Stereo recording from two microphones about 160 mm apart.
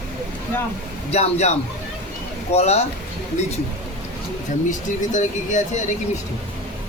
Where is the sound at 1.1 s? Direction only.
45° left (ahead or behind).